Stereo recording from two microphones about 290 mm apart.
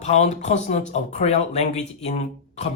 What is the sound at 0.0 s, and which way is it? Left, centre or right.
Speech, left.